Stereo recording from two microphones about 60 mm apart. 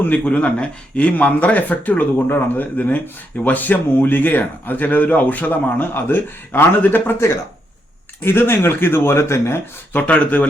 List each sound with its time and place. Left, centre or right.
0.0 s a man's voice: left
8.2 s a man's voice: left
9.9 s speech: left